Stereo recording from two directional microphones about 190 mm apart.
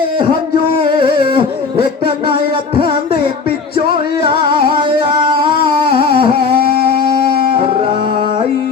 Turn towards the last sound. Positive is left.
turn(degrees=-25)  # may be behind; listen again after turning